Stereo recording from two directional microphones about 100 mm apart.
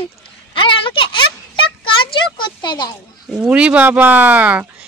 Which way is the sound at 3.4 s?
10° right (ahead or behind).